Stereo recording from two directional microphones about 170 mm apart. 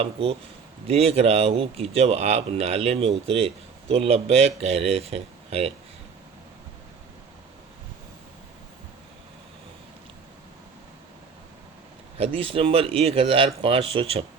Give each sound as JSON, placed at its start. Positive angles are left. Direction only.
{"t": 0.0, "sound": "speech", "side_deg": -35}
{"t": 12.1, "sound": "speech", "side_deg": -35}